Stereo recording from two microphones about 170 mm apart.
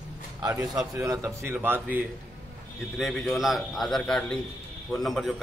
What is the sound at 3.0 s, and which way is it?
A man's voice, centre (ahead or behind).